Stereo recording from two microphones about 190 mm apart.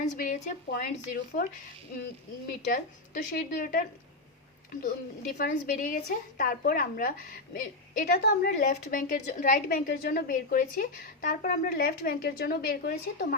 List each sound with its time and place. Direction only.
0.0 s a woman's voice: 40° left (ahead or behind)
2.7 s a woman's voice: 45° left (ahead or behind)
5.4 s a woman's voice: 45° left (ahead or behind)